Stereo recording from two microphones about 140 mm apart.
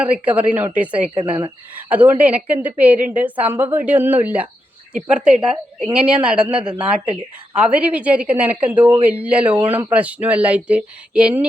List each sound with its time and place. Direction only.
0.0 s a woman's voice: 10° right (ahead or behind)
1.1 s speech: 40° right (ahead or behind)
1.7 s a woman's voice: 10° right (ahead or behind)